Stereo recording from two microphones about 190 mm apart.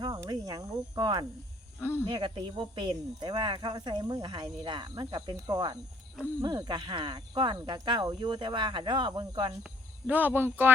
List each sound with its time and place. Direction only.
0.0 s speech: 20° right (ahead or behind)
1.8 s speech: 10° left (ahead or behind)
2.0 s speech: 25° right (ahead or behind)
10.1 s speech: 10° right (ahead or behind)